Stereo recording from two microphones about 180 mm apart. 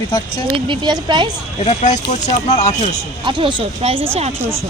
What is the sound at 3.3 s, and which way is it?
Speech, 25° right (ahead or behind).